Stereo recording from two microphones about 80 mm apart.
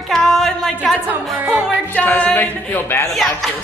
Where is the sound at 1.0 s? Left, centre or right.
Right.